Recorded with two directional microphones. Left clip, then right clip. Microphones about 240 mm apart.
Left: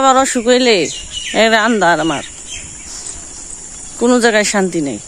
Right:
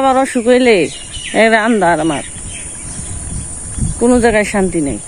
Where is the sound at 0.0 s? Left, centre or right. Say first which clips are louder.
Left 1 dB; left.